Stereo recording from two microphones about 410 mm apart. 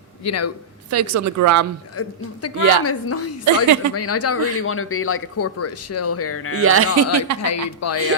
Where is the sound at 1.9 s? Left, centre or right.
Left.